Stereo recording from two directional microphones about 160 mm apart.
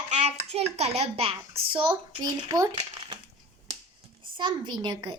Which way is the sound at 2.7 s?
35° right (ahead or behind).